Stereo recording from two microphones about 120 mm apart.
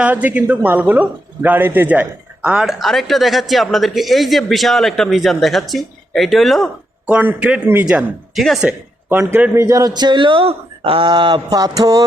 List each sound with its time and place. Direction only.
0.0 s speech: 15° right (ahead or behind)
7.1 s speech: 10° right (ahead or behind)
9.0 s a man's voice: 15° right (ahead or behind)